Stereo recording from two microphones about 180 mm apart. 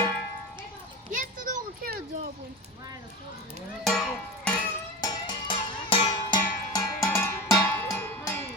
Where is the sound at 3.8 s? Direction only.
Centre (ahead or behind).